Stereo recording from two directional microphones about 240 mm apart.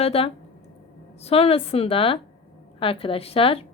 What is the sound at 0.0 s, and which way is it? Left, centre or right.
A woman's voice, left.